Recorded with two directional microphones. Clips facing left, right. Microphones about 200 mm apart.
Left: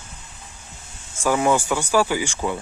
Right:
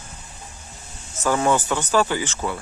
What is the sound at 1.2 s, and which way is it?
Speech, 10° left (ahead or behind).